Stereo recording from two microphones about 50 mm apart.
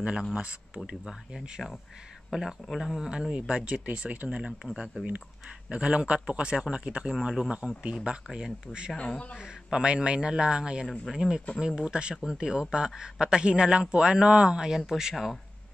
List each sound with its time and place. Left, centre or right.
0.8 s speech: centre
3.1 s speech: centre
4.7 s speech: centre
5.7 s speech: right
8.3 s speech: centre
8.9 s speech: left
9.4 s speech: centre